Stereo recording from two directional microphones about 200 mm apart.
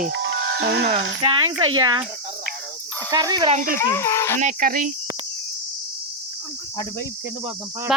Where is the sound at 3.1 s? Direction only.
20° right (ahead or behind).